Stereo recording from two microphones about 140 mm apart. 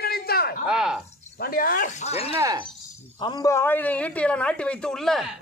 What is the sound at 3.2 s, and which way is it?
A woman's voice, 30° left (ahead or behind).